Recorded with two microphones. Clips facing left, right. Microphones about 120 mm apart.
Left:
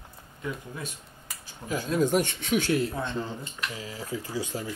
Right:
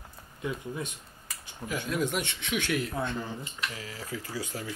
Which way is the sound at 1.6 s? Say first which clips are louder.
Left 4 dB; 30° left (ahead or behind).